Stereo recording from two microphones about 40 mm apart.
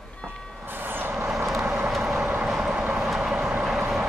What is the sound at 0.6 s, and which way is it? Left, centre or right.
Vehicle, right.